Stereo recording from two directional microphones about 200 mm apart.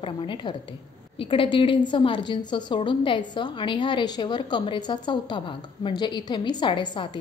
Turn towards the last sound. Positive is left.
turn(degrees=25)  # may be behind; listen again after turning